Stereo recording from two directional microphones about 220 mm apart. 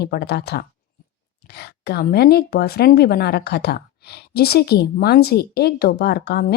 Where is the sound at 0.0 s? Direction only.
45° left (ahead or behind).